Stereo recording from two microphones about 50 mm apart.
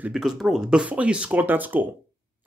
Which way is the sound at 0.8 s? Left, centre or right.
Right.